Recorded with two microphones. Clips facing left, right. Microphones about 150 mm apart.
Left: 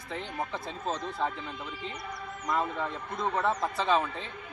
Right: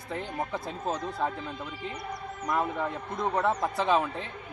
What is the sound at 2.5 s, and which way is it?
Speech, centre (ahead or behind).